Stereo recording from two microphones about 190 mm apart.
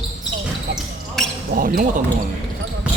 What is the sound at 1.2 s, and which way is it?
Basketball bounce, centre (ahead or behind).